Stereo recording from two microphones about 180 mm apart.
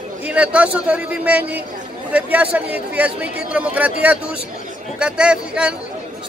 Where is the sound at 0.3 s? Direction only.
5° right (ahead or behind).